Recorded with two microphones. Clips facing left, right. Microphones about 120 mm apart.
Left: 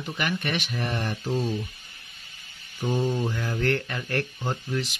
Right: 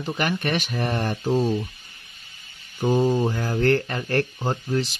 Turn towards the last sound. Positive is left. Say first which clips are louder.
# right 5 dB
turn(degrees=-35)  # may be behind; listen again after turning